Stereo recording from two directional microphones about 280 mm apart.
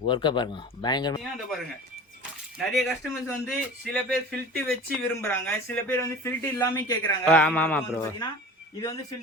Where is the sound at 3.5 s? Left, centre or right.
Centre.